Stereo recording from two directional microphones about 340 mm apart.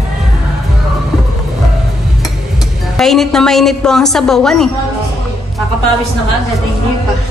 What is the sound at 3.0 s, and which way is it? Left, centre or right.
A woman's voice, centre.